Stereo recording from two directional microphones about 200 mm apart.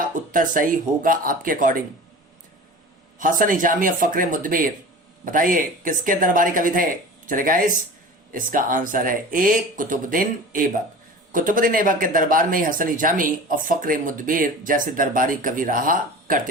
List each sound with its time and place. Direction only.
0.3 s speech: 45° right (ahead or behind)
3.2 s speech: 45° right (ahead or behind)